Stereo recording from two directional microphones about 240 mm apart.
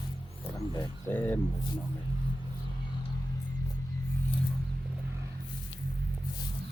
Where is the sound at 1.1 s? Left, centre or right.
Centre.